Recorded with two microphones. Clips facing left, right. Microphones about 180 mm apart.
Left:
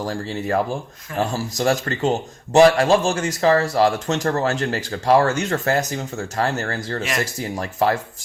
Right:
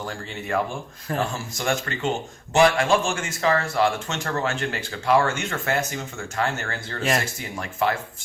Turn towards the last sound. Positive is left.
turn(degrees=35)  # may be behind; listen again after turning